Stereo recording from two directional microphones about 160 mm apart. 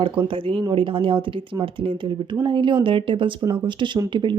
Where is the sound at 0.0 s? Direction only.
35° right (ahead or behind).